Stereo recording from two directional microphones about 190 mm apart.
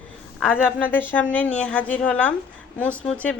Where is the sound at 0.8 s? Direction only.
10° left (ahead or behind).